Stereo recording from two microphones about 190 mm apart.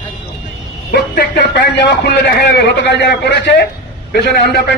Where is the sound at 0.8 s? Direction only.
55° left (ahead or behind).